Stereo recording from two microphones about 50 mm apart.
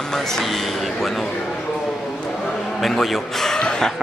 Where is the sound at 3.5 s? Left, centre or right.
Centre.